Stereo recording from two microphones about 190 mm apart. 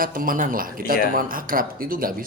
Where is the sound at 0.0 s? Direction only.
50° right (ahead or behind).